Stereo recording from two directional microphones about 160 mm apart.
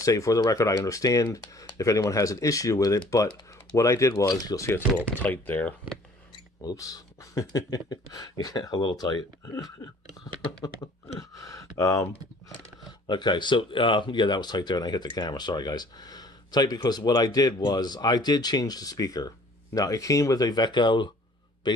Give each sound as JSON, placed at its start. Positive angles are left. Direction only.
{"t": 0.0, "sound": "speech", "side_deg": 20}
{"t": 6.3, "sound": "speech", "side_deg": 25}
{"t": 11.2, "sound": "speech", "side_deg": 20}
{"t": 13.1, "sound": "a man's voice", "side_deg": 30}